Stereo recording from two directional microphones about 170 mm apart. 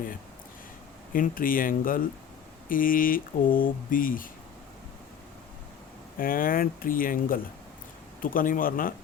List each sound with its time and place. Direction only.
1.1 s speech: 55° left (ahead or behind)
6.1 s speech: 55° left (ahead or behind)